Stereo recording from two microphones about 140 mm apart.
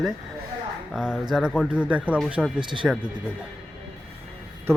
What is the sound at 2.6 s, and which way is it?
Speech, 35° right (ahead or behind).